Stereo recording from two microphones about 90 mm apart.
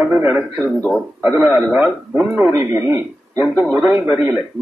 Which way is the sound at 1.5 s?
15° right (ahead or behind).